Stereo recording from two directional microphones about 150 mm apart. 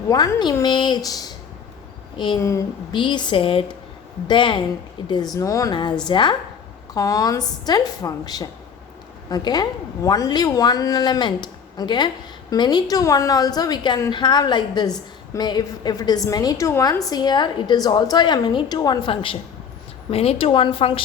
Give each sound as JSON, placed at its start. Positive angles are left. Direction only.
{"t": 0.1, "sound": "a woman's voice", "side_deg": 25}
{"t": 2.4, "sound": "a woman's voice", "side_deg": 20}
{"t": 2.9, "sound": "a woman's voice", "side_deg": 30}